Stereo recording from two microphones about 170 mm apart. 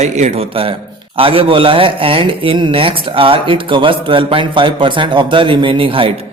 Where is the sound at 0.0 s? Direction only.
40° right (ahead or behind).